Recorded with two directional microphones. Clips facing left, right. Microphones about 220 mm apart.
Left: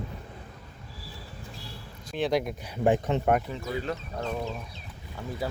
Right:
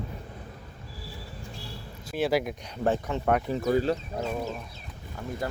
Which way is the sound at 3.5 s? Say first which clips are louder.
Right 8 dB; 40° right (ahead or behind).